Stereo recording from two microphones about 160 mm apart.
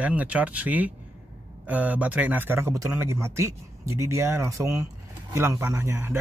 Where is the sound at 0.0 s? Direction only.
10° right (ahead or behind).